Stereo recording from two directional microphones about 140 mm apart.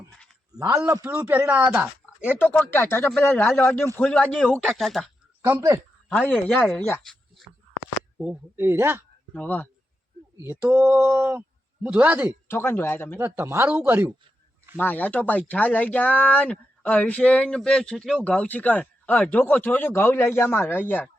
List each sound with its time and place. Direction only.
1.0 s a man's voice: 10° right (ahead or behind)
2.4 s speech: 15° left (ahead or behind)
5.5 s speech: 20° right (ahead or behind)
6.1 s speech: 10° left (ahead or behind)
7.0 s a sound: centre (ahead or behind)
8.2 s a man's voice: 10° right (ahead or behind)
9.3 s speech: 10° left (ahead or behind)
10.4 s a man's voice: 15° right (ahead or behind)
12.5 s speech: 15° left (ahead or behind)
13.1 s a man's voice: 15° right (ahead or behind)
14.8 s speech: 10° left (ahead or behind)